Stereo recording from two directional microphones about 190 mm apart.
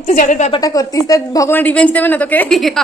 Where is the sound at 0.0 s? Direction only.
40° left (ahead or behind).